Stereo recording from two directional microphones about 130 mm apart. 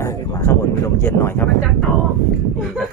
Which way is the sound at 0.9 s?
20° left (ahead or behind).